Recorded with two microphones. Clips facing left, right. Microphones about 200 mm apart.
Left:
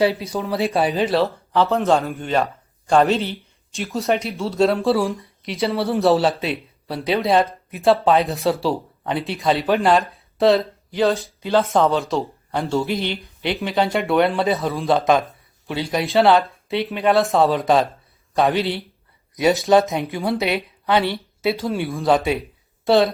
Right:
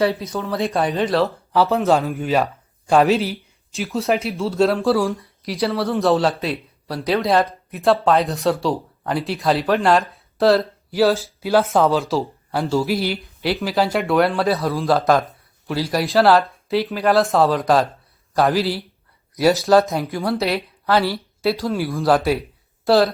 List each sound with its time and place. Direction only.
0.3 s speech: 15° left (ahead or behind)
0.6 s speech: 5° left (ahead or behind)